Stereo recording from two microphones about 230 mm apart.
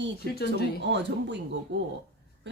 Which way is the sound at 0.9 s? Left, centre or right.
Right.